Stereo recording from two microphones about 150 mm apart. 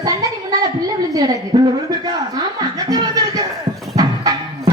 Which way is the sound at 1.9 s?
25° right (ahead or behind).